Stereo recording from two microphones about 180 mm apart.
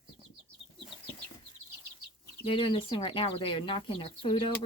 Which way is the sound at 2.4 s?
30° left (ahead or behind).